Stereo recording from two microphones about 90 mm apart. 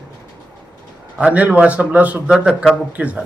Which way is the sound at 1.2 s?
15° right (ahead or behind).